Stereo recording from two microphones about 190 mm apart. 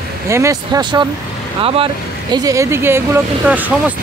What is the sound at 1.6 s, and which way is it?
Speech, 30° right (ahead or behind).